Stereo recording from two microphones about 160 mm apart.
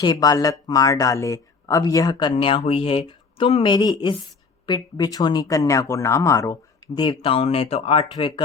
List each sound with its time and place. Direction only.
0.0 s speech: 25° left (ahead or behind)